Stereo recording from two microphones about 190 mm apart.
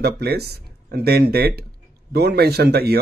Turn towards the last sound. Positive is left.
turn(degrees=-55)  # may be behind; listen again after turning